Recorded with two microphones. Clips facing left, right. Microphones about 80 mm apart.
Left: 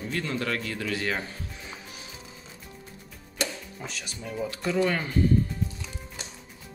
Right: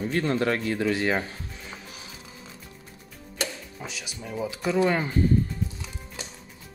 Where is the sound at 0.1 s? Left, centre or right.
Right.